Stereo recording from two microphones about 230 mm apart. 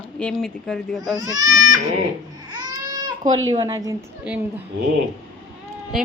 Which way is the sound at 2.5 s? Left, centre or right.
Centre.